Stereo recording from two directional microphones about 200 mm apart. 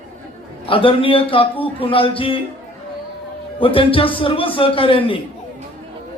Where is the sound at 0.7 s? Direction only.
25° left (ahead or behind).